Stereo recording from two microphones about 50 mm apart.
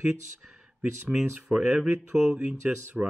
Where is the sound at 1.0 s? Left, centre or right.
Right.